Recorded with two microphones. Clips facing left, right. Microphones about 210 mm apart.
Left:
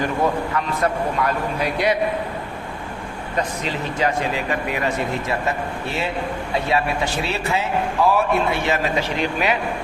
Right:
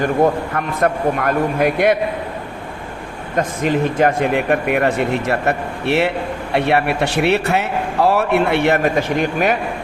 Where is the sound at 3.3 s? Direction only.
50° right (ahead or behind).